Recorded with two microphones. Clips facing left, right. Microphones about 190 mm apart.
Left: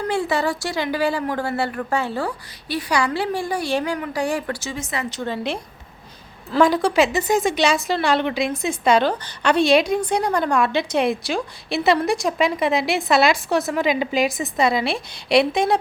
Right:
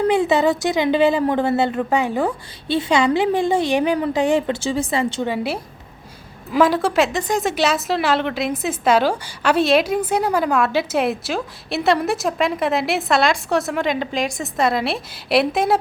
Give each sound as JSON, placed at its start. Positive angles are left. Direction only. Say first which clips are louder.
{"t": 0.1, "sound": "a woman's voice", "louder": "right 5 dB", "side_deg": -20}
{"t": 5.2, "sound": "a woman's voice", "louder": "right 3 dB", "side_deg": -10}
{"t": 6.6, "sound": "a woman's voice", "louder": "even", "side_deg": 0}